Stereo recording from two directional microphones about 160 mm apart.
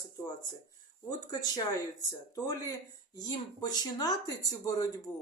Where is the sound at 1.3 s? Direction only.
25° left (ahead or behind).